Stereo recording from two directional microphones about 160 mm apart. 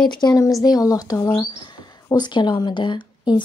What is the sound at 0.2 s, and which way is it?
Speech, 20° left (ahead or behind).